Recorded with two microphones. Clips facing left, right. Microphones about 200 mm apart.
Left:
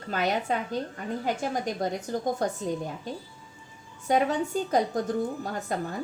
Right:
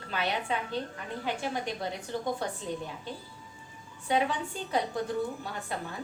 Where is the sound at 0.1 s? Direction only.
45° left (ahead or behind).